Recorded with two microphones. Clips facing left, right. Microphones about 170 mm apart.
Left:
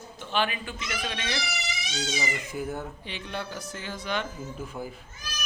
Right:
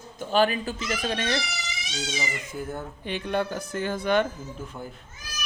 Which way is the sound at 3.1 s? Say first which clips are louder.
Right 13 dB; 50° right (ahead or behind).